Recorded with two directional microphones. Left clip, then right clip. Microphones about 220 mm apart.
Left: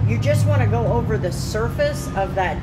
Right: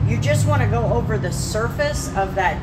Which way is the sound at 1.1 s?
30° left (ahead or behind).